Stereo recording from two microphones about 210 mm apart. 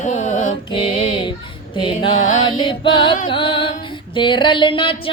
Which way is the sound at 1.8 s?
25° left (ahead or behind).